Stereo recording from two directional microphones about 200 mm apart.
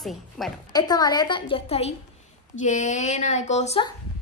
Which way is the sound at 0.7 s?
20° left (ahead or behind).